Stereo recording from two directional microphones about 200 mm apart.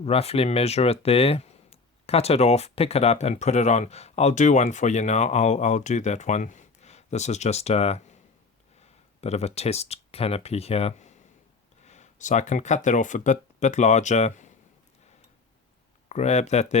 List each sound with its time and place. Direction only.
0.0 s speech: 30° left (ahead or behind)
16.0 s speech: 35° left (ahead or behind)